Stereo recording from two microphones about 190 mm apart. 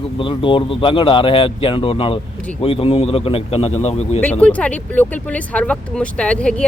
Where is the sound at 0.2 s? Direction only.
25° left (ahead or behind).